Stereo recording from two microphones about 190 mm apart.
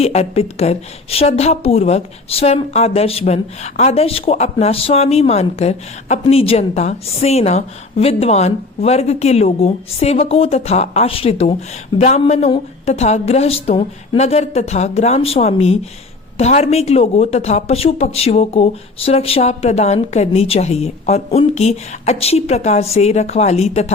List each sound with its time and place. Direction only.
0.0 s a woman's voice: 35° left (ahead or behind)